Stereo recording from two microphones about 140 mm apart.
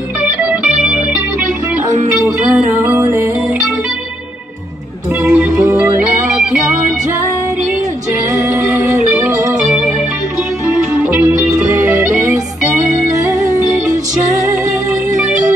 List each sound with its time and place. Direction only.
0.2 s music: 5° right (ahead or behind)
2.8 s music: 15° right (ahead or behind)
5.2 s music: 5° right (ahead or behind)